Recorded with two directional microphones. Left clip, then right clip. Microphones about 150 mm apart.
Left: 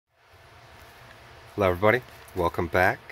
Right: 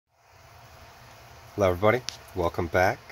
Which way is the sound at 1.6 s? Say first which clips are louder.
Left 1 dB; 5° left (ahead or behind).